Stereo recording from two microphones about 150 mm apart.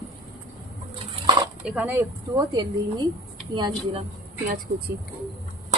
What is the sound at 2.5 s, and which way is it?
Speech, 30° right (ahead or behind).